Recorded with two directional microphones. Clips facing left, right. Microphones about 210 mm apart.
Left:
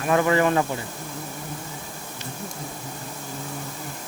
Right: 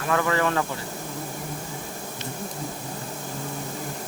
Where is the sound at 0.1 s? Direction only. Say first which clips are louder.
Left 4 dB; 20° left (ahead or behind).